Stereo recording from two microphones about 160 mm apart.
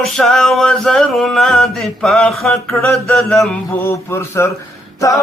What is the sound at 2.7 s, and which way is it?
Mantra, 10° left (ahead or behind).